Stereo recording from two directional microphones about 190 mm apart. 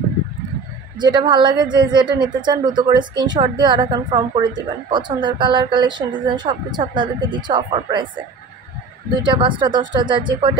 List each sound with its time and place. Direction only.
0.9 s a woman's voice: 25° right (ahead or behind)
9.2 s a woman's voice: 25° right (ahead or behind)